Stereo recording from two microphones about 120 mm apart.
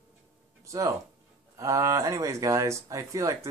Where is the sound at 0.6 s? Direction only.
30° right (ahead or behind).